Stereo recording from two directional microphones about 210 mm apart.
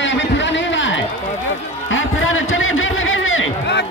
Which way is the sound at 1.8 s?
65° left (ahead or behind).